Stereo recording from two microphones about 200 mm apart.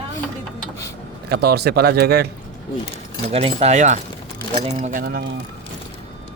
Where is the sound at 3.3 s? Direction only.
30° right (ahead or behind); by 5.2 s 50° right (ahead or behind).